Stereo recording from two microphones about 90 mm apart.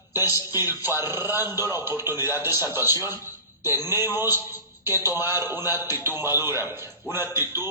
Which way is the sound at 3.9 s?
25° right (ahead or behind).